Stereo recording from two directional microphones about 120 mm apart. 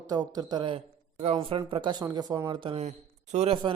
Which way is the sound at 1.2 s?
50° right (ahead or behind).